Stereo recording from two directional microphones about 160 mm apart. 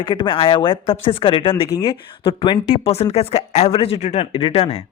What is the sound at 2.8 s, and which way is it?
Speech, 40° left (ahead or behind).